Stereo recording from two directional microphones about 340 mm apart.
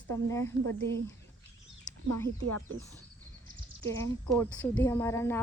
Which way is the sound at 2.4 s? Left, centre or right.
Right.